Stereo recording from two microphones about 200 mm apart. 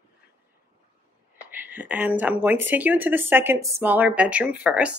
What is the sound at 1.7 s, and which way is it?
Speech, 5° right (ahead or behind).